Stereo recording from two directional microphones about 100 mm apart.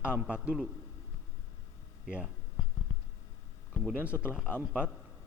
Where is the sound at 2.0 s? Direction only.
10° right (ahead or behind).